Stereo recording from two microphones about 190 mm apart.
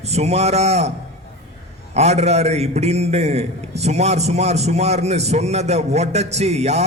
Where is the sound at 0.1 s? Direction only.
35° right (ahead or behind).